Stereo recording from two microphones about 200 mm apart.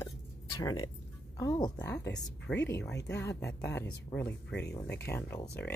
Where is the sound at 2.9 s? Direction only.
55° left (ahead or behind).